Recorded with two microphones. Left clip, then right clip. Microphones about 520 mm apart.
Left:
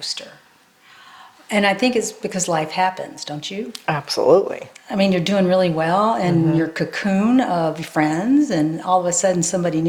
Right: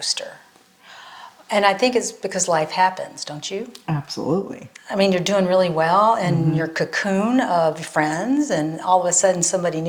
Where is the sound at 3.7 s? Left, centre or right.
Left.